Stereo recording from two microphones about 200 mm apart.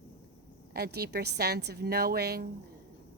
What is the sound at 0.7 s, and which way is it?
A woman's voice, 55° right (ahead or behind).